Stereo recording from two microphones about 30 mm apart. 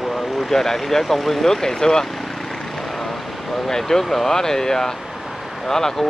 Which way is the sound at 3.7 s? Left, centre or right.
Centre.